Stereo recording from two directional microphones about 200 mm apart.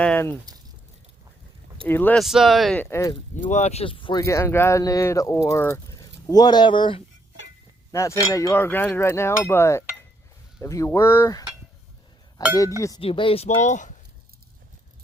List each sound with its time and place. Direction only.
0.0 s speech: 10° left (ahead or behind)
1.9 s speech: 10° left (ahead or behind)
2.8 s speech: 15° left (ahead or behind)
3.4 s speech: 35° left (ahead or behind)